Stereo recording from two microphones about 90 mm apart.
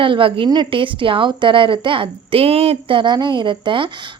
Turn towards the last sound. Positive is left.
turn(degrees=-65)  # may be behind; listen again after turning